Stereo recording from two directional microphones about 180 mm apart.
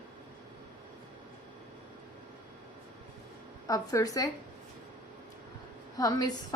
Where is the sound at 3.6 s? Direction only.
20° left (ahead or behind).